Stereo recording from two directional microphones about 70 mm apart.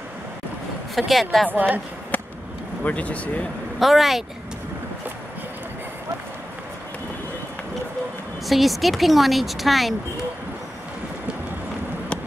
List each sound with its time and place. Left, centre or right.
0.9 s speech: centre
1.5 s a woman's voice: right
2.8 s speech: centre
3.8 s speech: centre
8.5 s speech: centre